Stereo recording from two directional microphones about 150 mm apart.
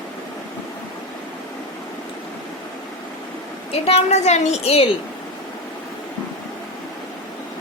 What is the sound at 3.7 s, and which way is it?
A woman's voice, 45° left (ahead or behind).